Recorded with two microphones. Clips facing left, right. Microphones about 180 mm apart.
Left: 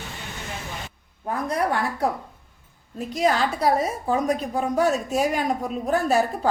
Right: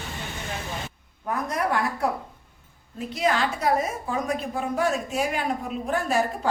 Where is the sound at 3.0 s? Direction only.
40° left (ahead or behind).